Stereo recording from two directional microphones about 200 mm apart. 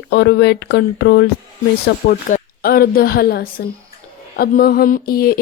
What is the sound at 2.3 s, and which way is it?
Speech, 45° left (ahead or behind).